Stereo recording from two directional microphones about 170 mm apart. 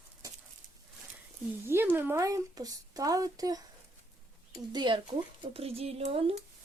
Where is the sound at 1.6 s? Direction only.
15° right (ahead or behind).